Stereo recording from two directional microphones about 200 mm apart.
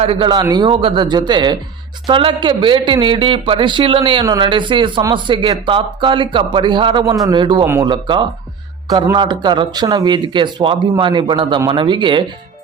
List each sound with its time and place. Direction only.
0.0 s a man's voice: 25° right (ahead or behind)